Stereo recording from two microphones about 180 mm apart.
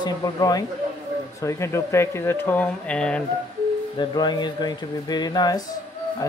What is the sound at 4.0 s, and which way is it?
Speech, 25° left (ahead or behind).